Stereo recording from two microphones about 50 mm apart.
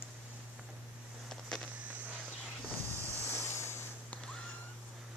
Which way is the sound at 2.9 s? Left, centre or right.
Right.